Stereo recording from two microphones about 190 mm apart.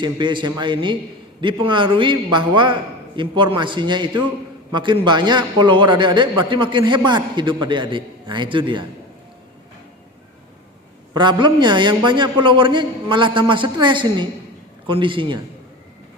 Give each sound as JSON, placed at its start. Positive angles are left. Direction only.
{"t": 0.0, "sound": "a man's voice", "side_deg": -25}
{"t": 11.1, "sound": "a man's voice", "side_deg": -25}